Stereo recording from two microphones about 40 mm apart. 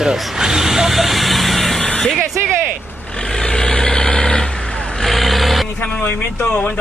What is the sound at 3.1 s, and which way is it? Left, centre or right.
Vehicle, centre.